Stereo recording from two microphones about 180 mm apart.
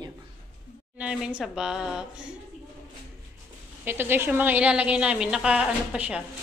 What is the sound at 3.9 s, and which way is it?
A woman's voice, 10° right (ahead or behind).